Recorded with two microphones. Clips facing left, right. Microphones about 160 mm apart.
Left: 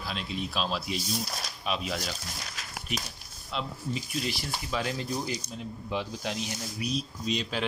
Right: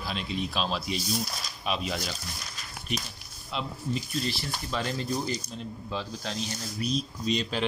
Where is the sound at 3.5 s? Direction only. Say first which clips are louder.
Right 1 dB; 10° left (ahead or behind).